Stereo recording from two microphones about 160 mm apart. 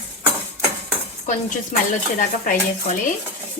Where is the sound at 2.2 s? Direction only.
55° left (ahead or behind).